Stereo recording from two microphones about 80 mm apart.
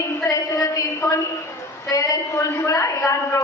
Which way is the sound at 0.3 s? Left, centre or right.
Left.